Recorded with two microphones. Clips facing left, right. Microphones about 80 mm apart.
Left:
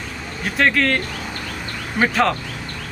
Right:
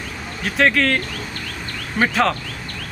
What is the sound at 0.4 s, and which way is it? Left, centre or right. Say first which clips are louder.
Speech: right 1 dB; centre.